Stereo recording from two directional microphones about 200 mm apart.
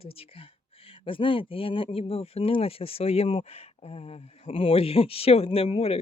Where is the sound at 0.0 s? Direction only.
30° left (ahead or behind).